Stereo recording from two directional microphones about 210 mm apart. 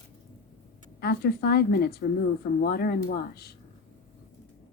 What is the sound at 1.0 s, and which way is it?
A woman's voice, 50° left (ahead or behind).